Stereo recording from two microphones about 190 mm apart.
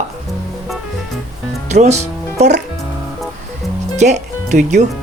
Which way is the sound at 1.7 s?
35° right (ahead or behind).